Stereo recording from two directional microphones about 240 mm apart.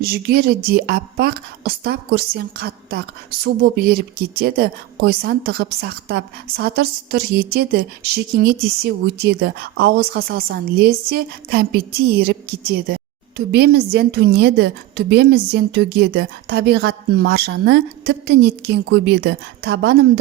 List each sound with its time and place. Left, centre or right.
0.0 s speech: right
13.3 s a woman's voice: right